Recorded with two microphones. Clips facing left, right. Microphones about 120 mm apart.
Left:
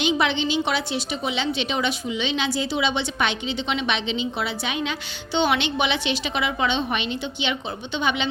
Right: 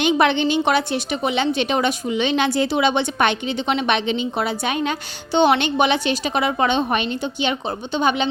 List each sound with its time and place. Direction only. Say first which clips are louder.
0.0 s a woman's voice: right 5 dB; 55° right (ahead or behind)